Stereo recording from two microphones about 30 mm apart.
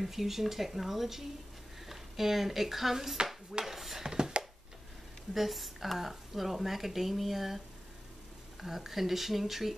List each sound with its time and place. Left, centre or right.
0.0 s speech: centre
3.6 s dishes: centre
4.1 s a sound: right
5.3 s speech: centre